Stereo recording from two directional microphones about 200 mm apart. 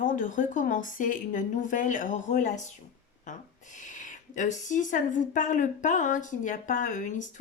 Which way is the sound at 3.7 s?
40° left (ahead or behind).